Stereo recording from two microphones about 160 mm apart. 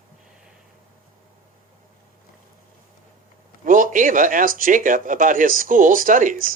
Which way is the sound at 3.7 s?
55° right (ahead or behind).